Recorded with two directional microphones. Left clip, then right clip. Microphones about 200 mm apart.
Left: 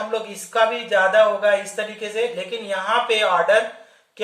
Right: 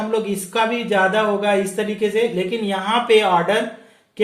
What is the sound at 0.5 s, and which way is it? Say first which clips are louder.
Speech: even; 30° right (ahead or behind).